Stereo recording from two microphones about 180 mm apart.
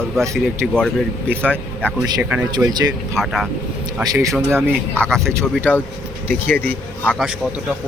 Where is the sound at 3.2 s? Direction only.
Centre (ahead or behind).